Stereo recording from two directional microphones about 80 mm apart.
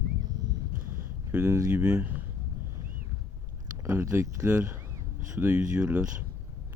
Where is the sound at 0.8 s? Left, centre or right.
Centre.